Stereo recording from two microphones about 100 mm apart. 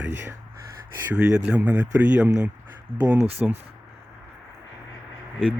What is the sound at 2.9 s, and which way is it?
Speech, 65° right (ahead or behind).